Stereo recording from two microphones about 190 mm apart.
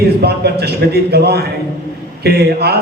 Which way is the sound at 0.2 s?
60° right (ahead or behind).